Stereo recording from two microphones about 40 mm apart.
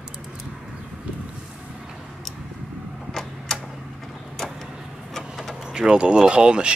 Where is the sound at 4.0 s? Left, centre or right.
Centre.